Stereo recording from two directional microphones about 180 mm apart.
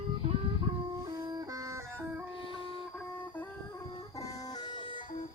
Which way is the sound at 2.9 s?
10° left (ahead or behind).